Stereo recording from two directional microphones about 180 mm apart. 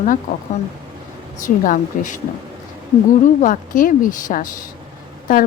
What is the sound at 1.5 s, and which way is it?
Speech, 45° left (ahead or behind).